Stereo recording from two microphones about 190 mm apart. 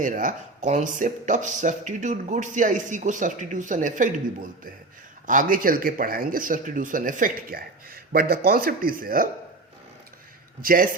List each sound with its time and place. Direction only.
0.0 s speech: 45° right (ahead or behind)
5.2 s speech: 45° right (ahead or behind)
10.6 s speech: 50° right (ahead or behind)